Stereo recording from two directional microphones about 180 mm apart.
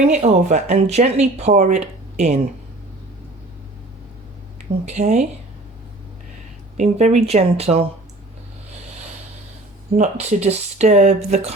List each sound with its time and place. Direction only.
0.1 s speech: 40° right (ahead or behind)
4.9 s speech: 40° right (ahead or behind)
6.7 s speech: 40° right (ahead or behind)
10.0 s speech: 40° right (ahead or behind)